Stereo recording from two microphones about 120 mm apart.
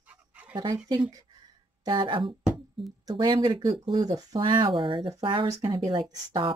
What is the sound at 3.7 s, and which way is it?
Speech, 50° right (ahead or behind).